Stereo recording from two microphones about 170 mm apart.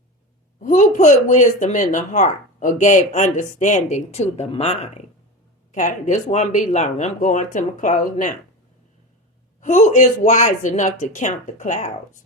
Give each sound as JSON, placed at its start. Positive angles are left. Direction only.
{"t": 0.6, "sound": "speech", "side_deg": 45}
{"t": 9.6, "sound": "speech", "side_deg": 45}